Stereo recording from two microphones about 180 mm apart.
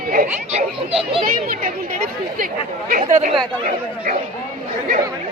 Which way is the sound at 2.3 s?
50° right (ahead or behind).